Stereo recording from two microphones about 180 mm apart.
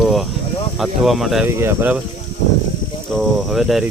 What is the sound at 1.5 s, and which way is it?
Speech, 15° right (ahead or behind).